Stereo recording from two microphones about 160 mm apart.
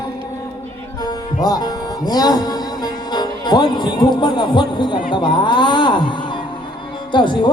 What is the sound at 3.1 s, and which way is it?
Speech, 25° left (ahead or behind).